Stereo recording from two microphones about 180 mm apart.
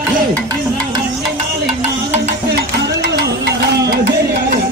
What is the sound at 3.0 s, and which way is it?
Music, 65° right (ahead or behind).